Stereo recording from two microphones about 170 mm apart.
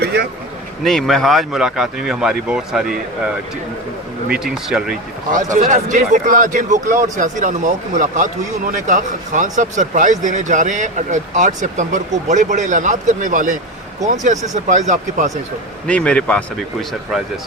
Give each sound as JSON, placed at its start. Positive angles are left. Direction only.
{"t": 0.0, "sound": "speech", "side_deg": -70}
{"t": 0.9, "sound": "speech", "side_deg": 0}
{"t": 4.3, "sound": "speech", "side_deg": -5}
{"t": 5.3, "sound": "speech", "side_deg": -50}
{"t": 15.9, "sound": "speech", "side_deg": 5}